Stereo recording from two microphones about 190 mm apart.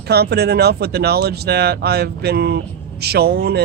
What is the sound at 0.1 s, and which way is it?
Speech, 60° right (ahead or behind).